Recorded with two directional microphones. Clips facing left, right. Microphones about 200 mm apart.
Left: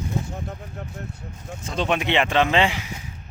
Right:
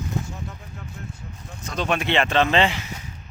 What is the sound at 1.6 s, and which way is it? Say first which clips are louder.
Speech: left 1 dB; 25° left (ahead or behind).